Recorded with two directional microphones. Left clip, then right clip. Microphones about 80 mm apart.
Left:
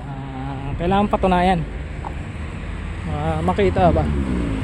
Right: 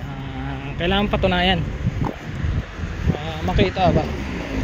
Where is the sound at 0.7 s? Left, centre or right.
Left.